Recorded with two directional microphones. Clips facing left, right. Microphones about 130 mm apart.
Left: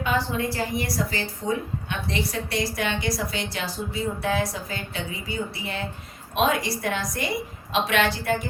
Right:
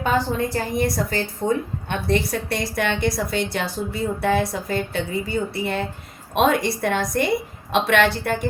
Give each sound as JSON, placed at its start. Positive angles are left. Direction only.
{"t": 0.0, "sound": "a woman's voice", "side_deg": -45}
{"t": 1.4, "sound": "a woman's voice", "side_deg": -65}
{"t": 1.9, "sound": "a woman's voice", "side_deg": -50}